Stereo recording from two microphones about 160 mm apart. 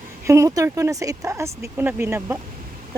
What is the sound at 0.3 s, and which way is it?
Speech, 20° right (ahead or behind).